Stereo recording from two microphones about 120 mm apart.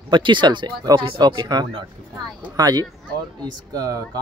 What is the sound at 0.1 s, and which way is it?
Speech, 40° right (ahead or behind).